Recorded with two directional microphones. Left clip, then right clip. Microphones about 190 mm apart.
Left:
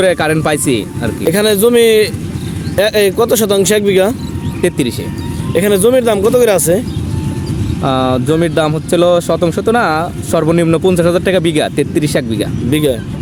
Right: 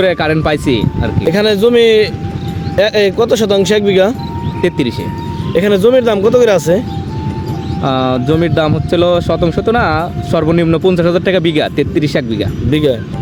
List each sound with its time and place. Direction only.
0.0 s speech: 10° left (ahead or behind)